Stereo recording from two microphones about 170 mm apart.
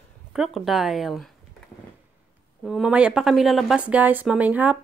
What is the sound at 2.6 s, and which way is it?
A woman's voice, 5° right (ahead or behind).